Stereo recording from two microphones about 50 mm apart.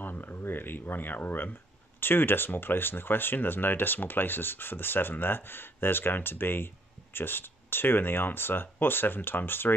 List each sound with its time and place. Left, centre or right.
0.0 s speech: left